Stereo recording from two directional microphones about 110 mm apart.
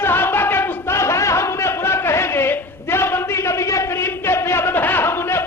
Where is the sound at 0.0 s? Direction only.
20° left (ahead or behind).